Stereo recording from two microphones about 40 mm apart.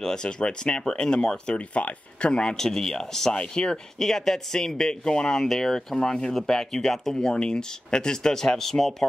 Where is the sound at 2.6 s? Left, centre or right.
Centre.